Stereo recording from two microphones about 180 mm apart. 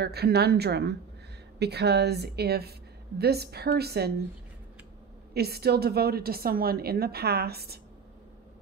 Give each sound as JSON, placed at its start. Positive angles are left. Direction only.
{"t": 0.0, "sound": "a woman's voice", "side_deg": -65}
{"t": 5.3, "sound": "a woman's voice", "side_deg": -60}